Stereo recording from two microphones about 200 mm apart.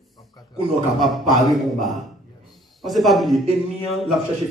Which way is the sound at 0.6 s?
Centre (ahead or behind).